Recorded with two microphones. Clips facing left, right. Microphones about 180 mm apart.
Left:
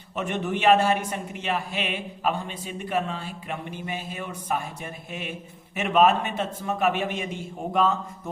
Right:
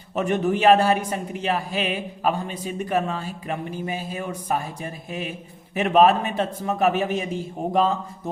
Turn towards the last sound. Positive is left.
turn(degrees=-35)  # may be behind; listen again after turning